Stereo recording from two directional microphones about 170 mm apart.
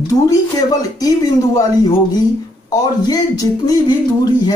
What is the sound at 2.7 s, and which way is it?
Speech, 20° left (ahead or behind).